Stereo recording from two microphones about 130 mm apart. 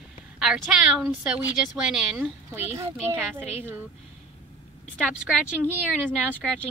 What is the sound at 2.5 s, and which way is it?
Speech, 20° right (ahead or behind).